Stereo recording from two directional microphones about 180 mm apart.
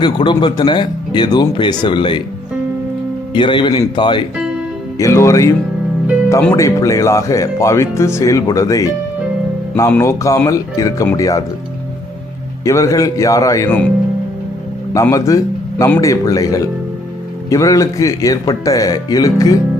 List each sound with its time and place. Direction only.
0.0 s speech: 25° left (ahead or behind)
3.3 s speech: 25° left (ahead or behind)
9.9 s speech: 15° left (ahead or behind)
12.6 s speech: 20° left (ahead or behind)
14.9 s speech: 15° left (ahead or behind)